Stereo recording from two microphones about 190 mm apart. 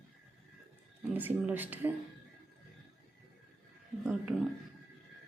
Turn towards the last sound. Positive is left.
turn(degrees=-5)  # may be behind; listen again after turning